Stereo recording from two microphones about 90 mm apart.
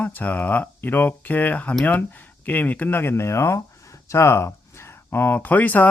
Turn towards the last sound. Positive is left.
turn(degrees=20)  # may be behind; listen again after turning